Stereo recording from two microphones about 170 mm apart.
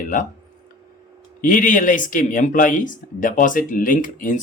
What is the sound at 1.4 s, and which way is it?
Speech, 50° left (ahead or behind).